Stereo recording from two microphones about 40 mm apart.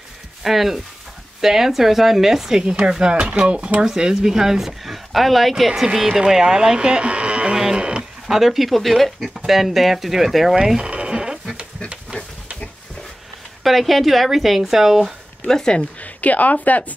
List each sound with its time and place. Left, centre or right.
0.4 s speech: centre; by 3.7 s right
3.8 s speech: centre
5.9 s speech: centre; by 7.5 s right
7.5 s radio: centre
8.3 s speech: centre
10.8 s sheep: right
13.7 s speech: centre
15.4 s speech: centre
16.0 s speech: left